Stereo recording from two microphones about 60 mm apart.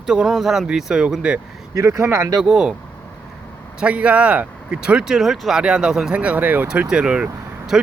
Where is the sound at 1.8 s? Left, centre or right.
Right.